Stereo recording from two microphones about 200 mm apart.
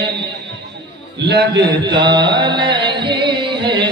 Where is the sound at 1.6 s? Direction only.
20° right (ahead or behind).